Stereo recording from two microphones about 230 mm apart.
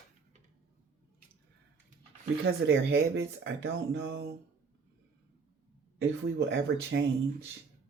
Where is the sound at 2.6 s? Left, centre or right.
Right.